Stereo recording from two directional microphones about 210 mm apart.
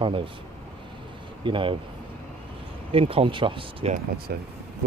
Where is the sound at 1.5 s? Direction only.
25° right (ahead or behind).